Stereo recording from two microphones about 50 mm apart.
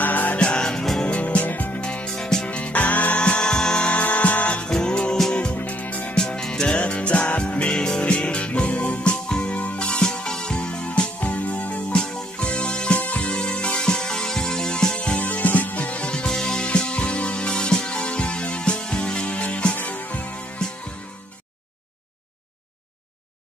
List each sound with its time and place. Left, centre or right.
0.0 s music: left
0.4 s music: centre
1.8 s music: left
2.1 s music: centre
2.4 s music: left
3.2 s music: centre
4.6 s music: centre; by 6.1 s left
6.1 s music: centre
12.0 s music: centre
15.1 s music: left